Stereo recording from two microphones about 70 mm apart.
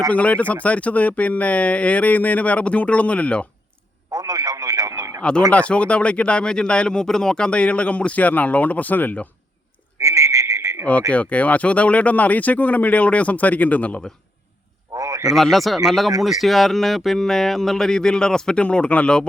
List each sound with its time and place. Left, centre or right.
0.1 s speech: centre
4.1 s radio: right
5.5 s speech: centre
10.0 s frog: right
11.1 s speech: centre
14.9 s a sound: right
15.4 s speech: centre